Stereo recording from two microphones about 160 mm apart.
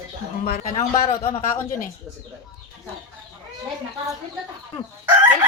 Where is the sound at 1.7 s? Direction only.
55° left (ahead or behind).